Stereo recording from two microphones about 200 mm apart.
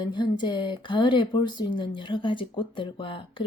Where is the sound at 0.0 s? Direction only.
20° left (ahead or behind).